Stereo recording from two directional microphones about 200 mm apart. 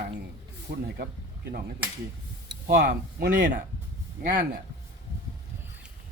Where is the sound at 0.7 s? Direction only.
50° right (ahead or behind).